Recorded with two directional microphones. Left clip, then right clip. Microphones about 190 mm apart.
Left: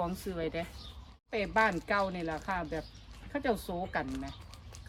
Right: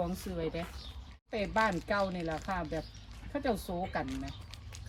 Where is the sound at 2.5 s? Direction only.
Centre (ahead or behind).